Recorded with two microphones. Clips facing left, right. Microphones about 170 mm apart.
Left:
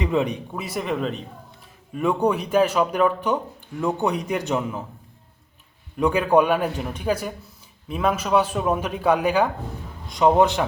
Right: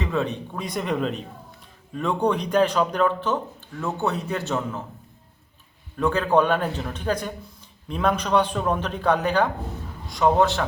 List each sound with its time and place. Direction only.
0.0 s a man's voice: 15° left (ahead or behind)
6.0 s a man's voice: 15° left (ahead or behind)